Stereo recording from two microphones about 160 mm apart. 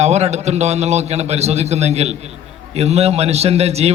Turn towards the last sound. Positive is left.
turn(degrees=-40)  # may be behind; listen again after turning